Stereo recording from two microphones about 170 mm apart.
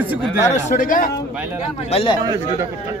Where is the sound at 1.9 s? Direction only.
35° left (ahead or behind).